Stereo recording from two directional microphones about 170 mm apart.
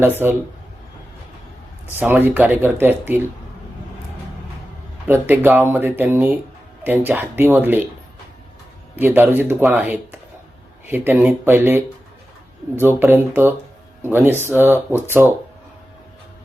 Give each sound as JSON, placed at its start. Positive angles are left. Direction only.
{"t": 0.0, "sound": "speech", "side_deg": -15}
{"t": 2.0, "sound": "speech", "side_deg": -10}
{"t": 5.0, "sound": "speech", "side_deg": -15}
{"t": 9.0, "sound": "speech", "side_deg": -10}
{"t": 12.8, "sound": "speech", "side_deg": -10}